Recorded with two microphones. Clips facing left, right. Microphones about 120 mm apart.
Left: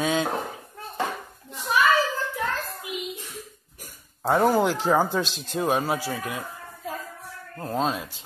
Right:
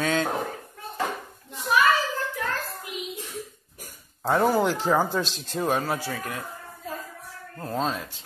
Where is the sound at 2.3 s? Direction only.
15° left (ahead or behind).